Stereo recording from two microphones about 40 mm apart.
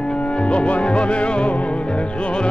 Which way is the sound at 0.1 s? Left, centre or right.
Left.